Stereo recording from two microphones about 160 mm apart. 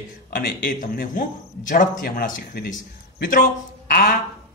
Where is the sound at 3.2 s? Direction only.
60° left (ahead or behind).